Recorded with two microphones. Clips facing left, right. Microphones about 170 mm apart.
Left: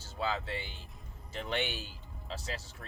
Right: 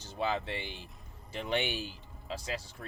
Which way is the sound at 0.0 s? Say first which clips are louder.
Right 2 dB; 20° right (ahead or behind).